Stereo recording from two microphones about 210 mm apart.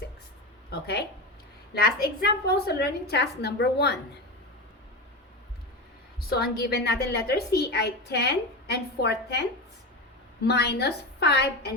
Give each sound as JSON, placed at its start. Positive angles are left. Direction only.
{"t": 0.7, "sound": "a woman's voice", "side_deg": 50}
{"t": 6.1, "sound": "a woman's voice", "side_deg": 50}
{"t": 10.4, "sound": "a woman's voice", "side_deg": 50}